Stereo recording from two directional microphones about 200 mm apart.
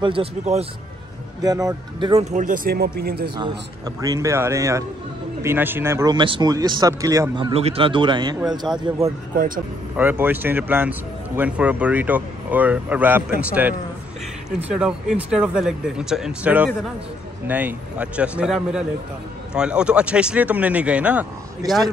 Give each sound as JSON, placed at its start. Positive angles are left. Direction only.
{"t": 0.0, "sound": "speech", "side_deg": -25}
{"t": 1.4, "sound": "speech", "side_deg": -20}
{"t": 2.3, "sound": "speech", "side_deg": -40}
{"t": 3.3, "sound": "speech", "side_deg": -20}
{"t": 9.3, "sound": "speech", "side_deg": -45}
{"t": 9.9, "sound": "a man's voice", "side_deg": -10}